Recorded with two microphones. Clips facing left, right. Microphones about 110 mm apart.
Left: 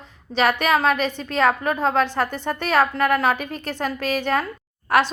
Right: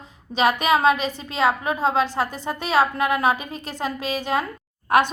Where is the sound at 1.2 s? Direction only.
10° right (ahead or behind).